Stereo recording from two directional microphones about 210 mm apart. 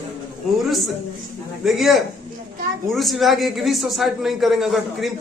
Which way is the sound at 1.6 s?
Centre (ahead or behind).